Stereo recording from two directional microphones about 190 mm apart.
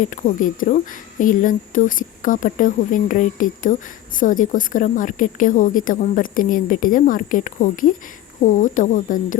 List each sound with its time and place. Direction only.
0.0 s speech: 45° left (ahead or behind)